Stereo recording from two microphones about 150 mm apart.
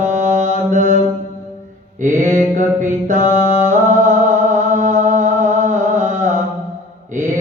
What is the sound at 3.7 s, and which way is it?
Music, 55° right (ahead or behind).